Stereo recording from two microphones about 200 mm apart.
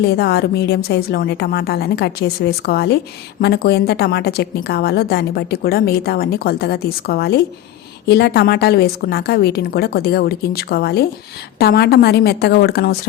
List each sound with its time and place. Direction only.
0.0 s a woman's voice: 55° left (ahead or behind)